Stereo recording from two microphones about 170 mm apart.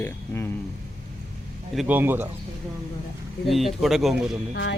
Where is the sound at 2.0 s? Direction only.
15° right (ahead or behind).